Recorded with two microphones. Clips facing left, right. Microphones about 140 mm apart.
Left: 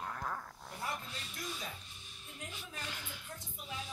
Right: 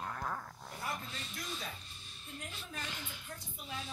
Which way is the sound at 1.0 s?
10° left (ahead or behind).